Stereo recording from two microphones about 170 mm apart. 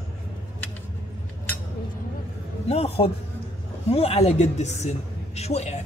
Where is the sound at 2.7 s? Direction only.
35° left (ahead or behind).